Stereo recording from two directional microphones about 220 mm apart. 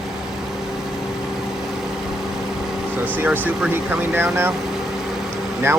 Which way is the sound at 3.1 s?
10° right (ahead or behind).